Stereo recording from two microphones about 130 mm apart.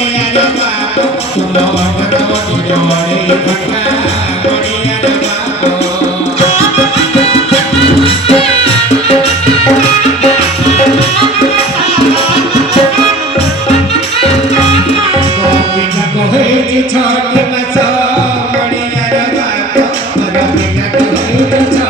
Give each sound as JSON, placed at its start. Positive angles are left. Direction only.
{"t": 8.0, "sound": "music", "side_deg": 50}